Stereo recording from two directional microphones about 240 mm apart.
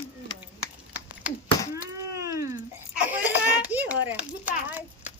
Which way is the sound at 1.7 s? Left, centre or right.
Centre.